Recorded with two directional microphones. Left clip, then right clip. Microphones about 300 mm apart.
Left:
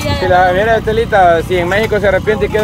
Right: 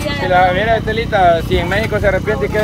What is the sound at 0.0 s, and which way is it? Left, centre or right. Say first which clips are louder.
Vehicle: left 3 dB; left.